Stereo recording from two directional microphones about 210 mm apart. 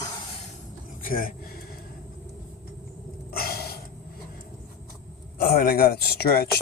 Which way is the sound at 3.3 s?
45° left (ahead or behind).